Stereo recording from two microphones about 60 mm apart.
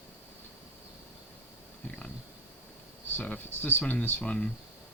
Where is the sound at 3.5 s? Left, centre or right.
Left.